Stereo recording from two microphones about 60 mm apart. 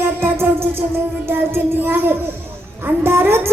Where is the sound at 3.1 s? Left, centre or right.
Right.